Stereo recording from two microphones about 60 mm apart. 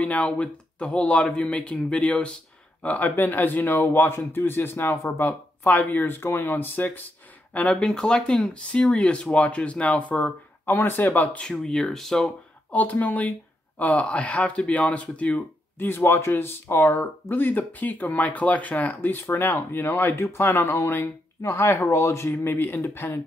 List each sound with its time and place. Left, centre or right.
0.0 s speech: left
7.5 s speech: left
7.8 s speech: centre; by 11.2 s left
11.3 s speech: centre
12.7 s speech: left
15.8 s speech: left
19.2 s speech: left
22.3 s speech: left